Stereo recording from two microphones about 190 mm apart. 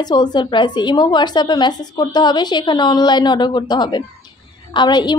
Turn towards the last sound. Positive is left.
turn(degrees=20)  # may be behind; listen again after turning